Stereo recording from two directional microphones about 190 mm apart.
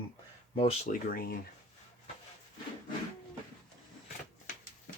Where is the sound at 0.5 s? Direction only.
35° left (ahead or behind).